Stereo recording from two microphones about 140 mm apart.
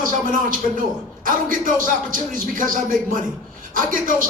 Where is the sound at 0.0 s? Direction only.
75° right (ahead or behind).